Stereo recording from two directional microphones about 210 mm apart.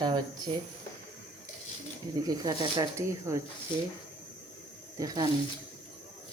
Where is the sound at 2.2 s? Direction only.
20° right (ahead or behind).